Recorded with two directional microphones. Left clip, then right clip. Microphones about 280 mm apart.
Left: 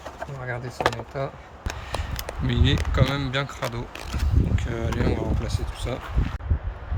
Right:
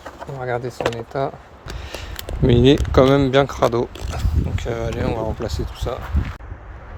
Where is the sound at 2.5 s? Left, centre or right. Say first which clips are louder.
Right 12 dB; centre.